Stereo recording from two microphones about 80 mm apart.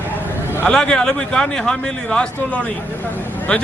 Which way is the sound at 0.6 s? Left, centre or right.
Centre.